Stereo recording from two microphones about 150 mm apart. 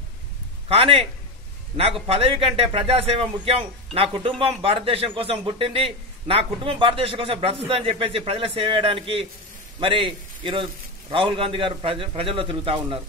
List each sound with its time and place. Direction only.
0.7 s speech: 40° right (ahead or behind)
2.0 s speech: 40° right (ahead or behind)